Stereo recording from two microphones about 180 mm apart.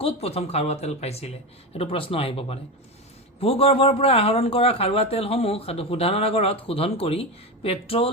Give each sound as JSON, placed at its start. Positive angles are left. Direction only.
{"t": 0.0, "sound": "a man's voice", "side_deg": 35}